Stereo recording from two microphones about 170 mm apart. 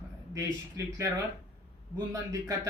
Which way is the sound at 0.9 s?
20° right (ahead or behind).